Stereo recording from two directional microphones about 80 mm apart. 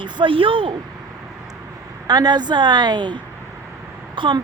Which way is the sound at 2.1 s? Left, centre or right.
Right.